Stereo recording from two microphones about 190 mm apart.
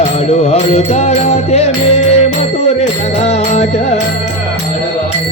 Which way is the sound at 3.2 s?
35° left (ahead or behind).